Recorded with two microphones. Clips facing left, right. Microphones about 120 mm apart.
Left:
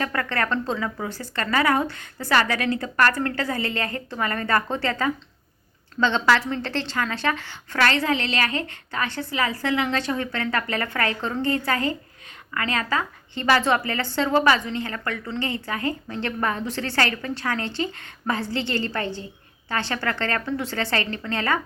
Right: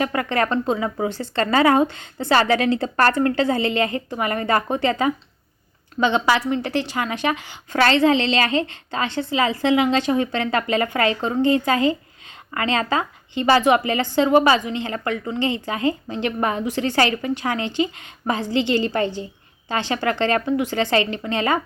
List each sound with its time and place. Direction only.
0.0 s a woman's voice: 15° right (ahead or behind)